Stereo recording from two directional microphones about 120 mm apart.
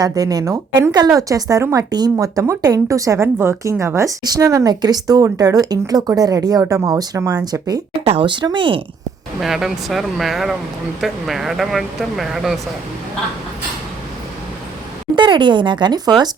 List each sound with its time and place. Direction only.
0.0 s a woman's voice: 30° right (ahead or behind)
8.0 s speech: 50° right (ahead or behind)
9.4 s speech: 5° right (ahead or behind)
15.1 s speech: 40° right (ahead or behind)